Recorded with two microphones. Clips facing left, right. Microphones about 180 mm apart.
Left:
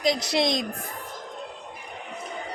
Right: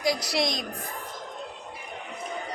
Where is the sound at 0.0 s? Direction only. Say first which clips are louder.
Left 3 dB; 20° left (ahead or behind).